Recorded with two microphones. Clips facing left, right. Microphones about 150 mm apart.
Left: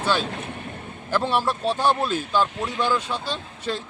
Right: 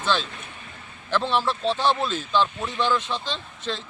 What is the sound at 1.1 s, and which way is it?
Speech, 10° left (ahead or behind).